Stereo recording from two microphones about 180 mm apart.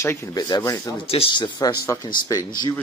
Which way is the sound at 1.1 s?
30° left (ahead or behind).